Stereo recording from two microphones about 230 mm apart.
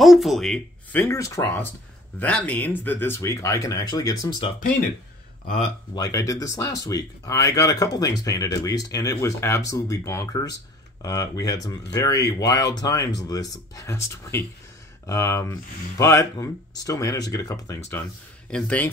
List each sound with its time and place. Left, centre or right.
0.0 s speech: centre
5.9 s speech: centre